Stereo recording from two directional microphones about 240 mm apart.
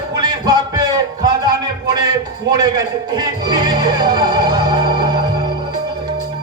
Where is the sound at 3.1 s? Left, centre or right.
Centre.